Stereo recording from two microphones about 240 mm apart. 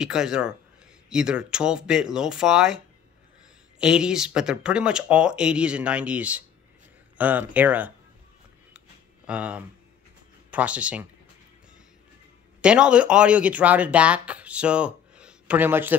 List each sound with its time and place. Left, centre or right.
0.0 s speech: centre
3.8 s speech: centre
8.7 s a sound: centre
10.5 s speech: centre
12.6 s speech: centre